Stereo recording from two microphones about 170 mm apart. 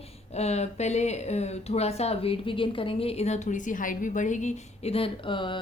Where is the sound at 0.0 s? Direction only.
40° left (ahead or behind).